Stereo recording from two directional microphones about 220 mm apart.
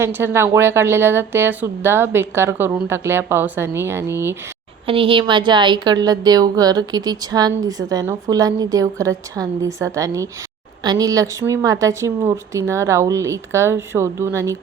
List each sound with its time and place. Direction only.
0.0 s a woman's voice: 10° right (ahead or behind)
4.9 s a woman's voice: 25° right (ahead or behind)